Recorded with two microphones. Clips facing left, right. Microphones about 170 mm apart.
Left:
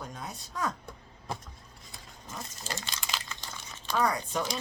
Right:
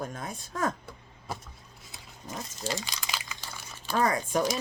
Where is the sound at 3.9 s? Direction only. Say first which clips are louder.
Right 3 dB; 50° right (ahead or behind).